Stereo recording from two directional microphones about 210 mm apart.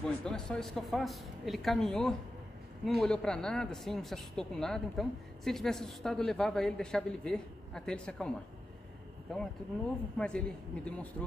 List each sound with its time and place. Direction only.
0.0 s speech: 5° left (ahead or behind)
9.3 s speech: 5° left (ahead or behind)